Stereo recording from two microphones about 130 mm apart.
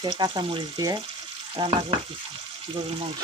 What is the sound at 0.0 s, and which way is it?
Speech, 35° right (ahead or behind).